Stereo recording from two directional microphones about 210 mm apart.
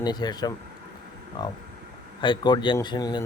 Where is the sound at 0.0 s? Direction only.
20° left (ahead or behind).